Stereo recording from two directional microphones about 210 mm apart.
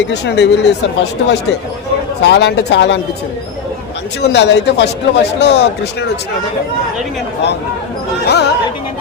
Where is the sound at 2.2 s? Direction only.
55° left (ahead or behind).